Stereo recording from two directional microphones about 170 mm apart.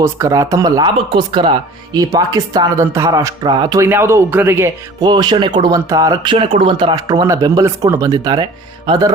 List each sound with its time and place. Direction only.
0.0 s speech: 20° right (ahead or behind)
3.8 s speech: 15° right (ahead or behind)
4.9 s speech: 25° right (ahead or behind)
6.3 s speech: 35° right (ahead or behind)